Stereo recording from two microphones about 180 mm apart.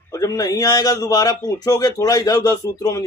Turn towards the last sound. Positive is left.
turn(degrees=20)  # may be behind; listen again after turning